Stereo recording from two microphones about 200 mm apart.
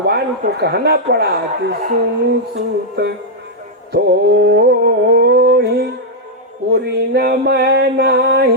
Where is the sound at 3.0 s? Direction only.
55° right (ahead or behind).